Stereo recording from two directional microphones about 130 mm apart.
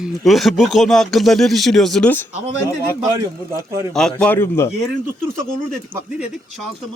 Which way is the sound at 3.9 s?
5° left (ahead or behind).